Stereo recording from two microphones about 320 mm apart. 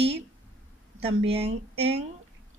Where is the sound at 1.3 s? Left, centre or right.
Centre.